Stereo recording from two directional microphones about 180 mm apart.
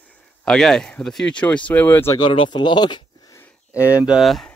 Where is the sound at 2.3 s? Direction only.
25° left (ahead or behind).